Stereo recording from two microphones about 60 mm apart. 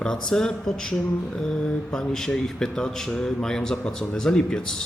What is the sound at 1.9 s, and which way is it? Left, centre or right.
A man's voice, centre.